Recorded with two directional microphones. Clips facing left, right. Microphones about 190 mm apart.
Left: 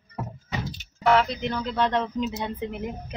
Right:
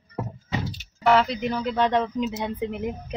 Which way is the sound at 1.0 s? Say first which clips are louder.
Right 1 dB; centre (ahead or behind).